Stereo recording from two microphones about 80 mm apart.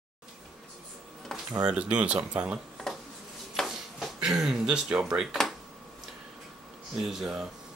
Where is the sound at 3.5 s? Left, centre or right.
Centre.